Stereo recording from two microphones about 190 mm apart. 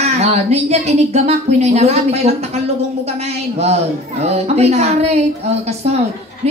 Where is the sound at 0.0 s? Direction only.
35° right (ahead or behind).